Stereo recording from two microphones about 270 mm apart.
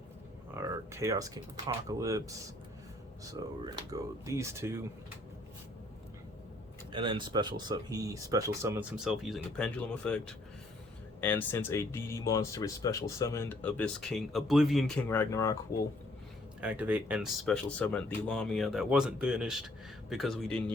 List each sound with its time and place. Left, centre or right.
0.5 s speech: centre
3.4 s speech: centre
6.9 s speech: centre
16.6 s speech: centre